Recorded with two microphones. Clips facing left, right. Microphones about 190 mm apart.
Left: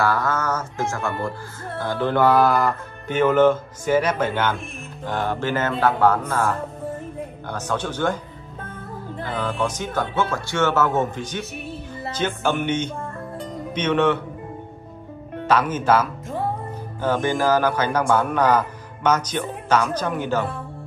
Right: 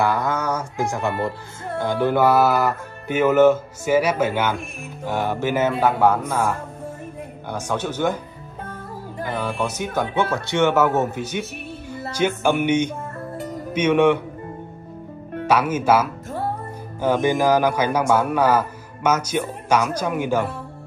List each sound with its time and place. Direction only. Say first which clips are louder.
0.0 s speech: right 1 dB; 15° right (ahead or behind)
9.2 s speech: even; 10° right (ahead or behind)
13.4 s music: right 4 dB; 10° right (ahead or behind)
15.4 s speech: right 1 dB; 10° right (ahead or behind)